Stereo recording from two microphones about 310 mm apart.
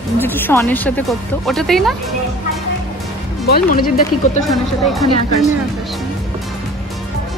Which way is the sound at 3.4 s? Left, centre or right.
Left.